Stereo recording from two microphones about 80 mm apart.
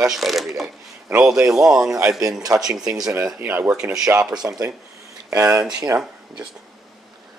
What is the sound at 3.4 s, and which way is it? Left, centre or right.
Speech, centre.